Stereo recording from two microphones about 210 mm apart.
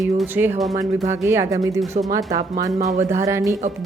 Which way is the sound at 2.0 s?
35° right (ahead or behind).